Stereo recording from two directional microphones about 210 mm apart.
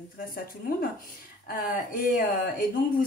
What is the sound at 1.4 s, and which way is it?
A woman's voice, 40° left (ahead or behind).